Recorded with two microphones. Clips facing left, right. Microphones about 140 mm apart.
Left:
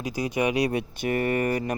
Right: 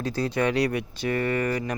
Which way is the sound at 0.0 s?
15° left (ahead or behind).